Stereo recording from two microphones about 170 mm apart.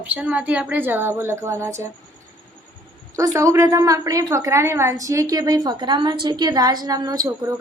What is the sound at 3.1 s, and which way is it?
A woman's voice, 20° right (ahead or behind).